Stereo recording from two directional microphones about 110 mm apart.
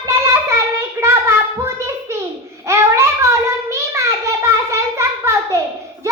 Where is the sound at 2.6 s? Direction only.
25° right (ahead or behind).